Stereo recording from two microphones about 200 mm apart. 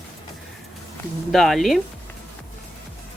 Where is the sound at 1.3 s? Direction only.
Centre (ahead or behind).